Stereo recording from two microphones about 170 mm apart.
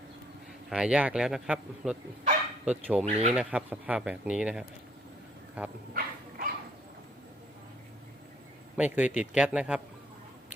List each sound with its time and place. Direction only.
0.7 s speech: 5° right (ahead or behind)
3.1 s speech: 40° right (ahead or behind)
3.3 s speech: 5° right (ahead or behind)
5.9 s dog: 60° right (ahead or behind)
8.8 s speech: 10° right (ahead or behind)